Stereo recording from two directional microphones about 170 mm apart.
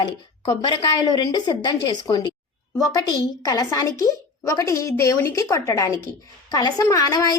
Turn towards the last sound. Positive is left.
turn(degrees=20)  # may be behind; listen again after turning